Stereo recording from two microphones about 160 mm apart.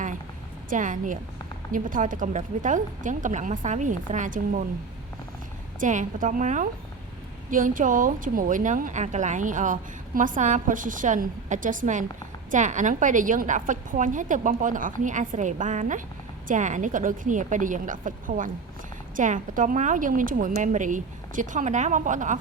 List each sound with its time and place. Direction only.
0.7 s a woman's voice: 55° right (ahead or behind)
5.8 s a woman's voice: 55° right (ahead or behind)